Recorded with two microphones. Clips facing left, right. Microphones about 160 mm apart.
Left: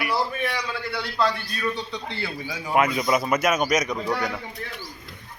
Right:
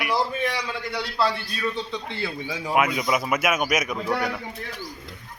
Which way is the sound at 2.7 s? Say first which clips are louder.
Left 1 dB; 5° right (ahead or behind).